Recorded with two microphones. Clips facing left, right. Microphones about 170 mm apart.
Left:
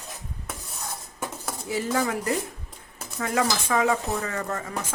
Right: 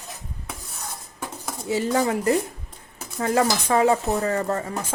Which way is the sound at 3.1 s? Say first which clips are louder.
Right 4 dB; 35° right (ahead or behind).